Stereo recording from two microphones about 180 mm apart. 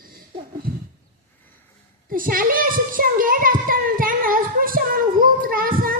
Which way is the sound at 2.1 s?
50° right (ahead or behind).